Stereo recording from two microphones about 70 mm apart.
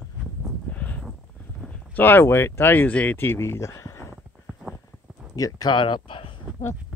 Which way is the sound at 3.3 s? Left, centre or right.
Left.